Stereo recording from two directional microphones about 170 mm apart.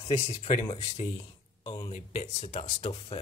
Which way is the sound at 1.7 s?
30° left (ahead or behind).